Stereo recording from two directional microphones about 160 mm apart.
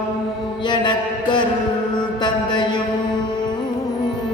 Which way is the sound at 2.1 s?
30° left (ahead or behind).